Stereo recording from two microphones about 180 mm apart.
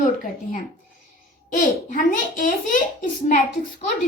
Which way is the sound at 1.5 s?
45° left (ahead or behind).